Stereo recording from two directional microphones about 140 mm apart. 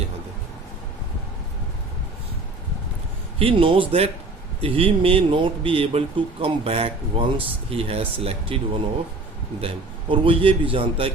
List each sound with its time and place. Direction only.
3.3 s speech: 40° right (ahead or behind)